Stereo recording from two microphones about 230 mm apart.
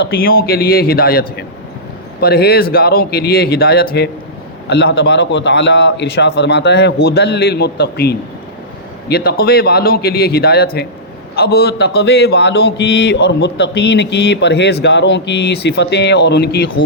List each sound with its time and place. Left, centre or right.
0.0 s a man's voice: left
2.2 s a man's voice: left